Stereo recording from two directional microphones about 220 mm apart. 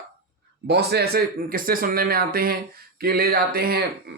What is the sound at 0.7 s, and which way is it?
Speech, 45° right (ahead or behind).